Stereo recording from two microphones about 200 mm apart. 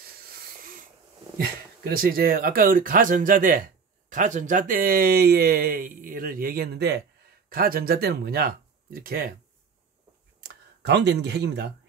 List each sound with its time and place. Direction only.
1.8 s speech: 50° right (ahead or behind)
10.4 s speech: 55° right (ahead or behind)